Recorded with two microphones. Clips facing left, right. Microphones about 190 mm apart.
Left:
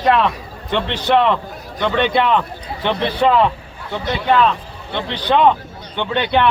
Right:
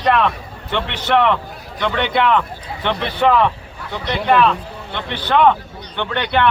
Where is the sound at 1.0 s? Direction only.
15° left (ahead or behind).